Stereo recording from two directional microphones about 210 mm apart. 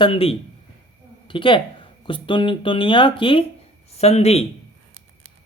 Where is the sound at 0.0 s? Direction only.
25° left (ahead or behind).